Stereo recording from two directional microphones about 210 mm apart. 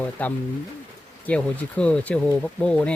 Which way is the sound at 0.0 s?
5° left (ahead or behind).